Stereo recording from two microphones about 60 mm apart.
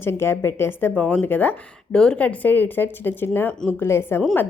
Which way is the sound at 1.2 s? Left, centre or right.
Left.